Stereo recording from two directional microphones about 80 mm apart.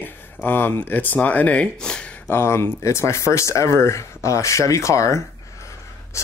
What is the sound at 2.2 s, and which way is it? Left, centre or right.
Speech, left.